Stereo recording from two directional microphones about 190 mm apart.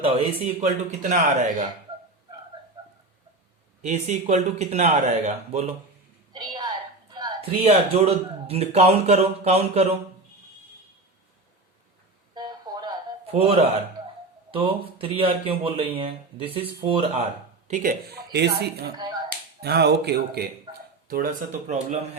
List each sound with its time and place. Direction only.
0.0 s speech: 35° right (ahead or behind)
3.8 s speech: 40° right (ahead or behind)
6.3 s a sound: 20° right (ahead or behind)
7.7 s speech: 30° right (ahead or behind)
12.3 s a sound: 20° right (ahead or behind)
13.3 s speech: 35° right (ahead or behind)
17.7 s speech: 50° right (ahead or behind)
18.9 s finger snapping: 20° right (ahead or behind)
19.6 s speech: 60° right (ahead or behind); by 22.2 s 35° right (ahead or behind)